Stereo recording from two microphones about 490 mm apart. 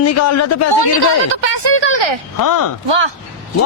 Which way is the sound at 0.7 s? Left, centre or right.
Left.